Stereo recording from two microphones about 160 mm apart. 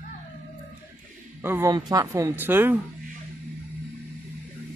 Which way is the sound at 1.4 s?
15° right (ahead or behind).